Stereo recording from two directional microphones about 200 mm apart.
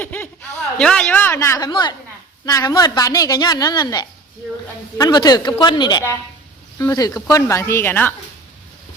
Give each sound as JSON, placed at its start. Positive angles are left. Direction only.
{"t": 0.0, "sound": "a woman's voice", "side_deg": 10}